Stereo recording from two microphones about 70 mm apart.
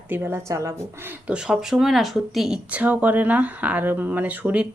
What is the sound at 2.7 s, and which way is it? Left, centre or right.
Speech, right.